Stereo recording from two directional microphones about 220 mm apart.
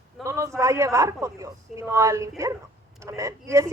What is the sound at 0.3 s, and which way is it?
A man's voice, 15° right (ahead or behind).